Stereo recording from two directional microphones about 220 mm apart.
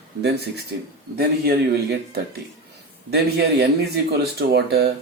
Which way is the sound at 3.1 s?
50° right (ahead or behind).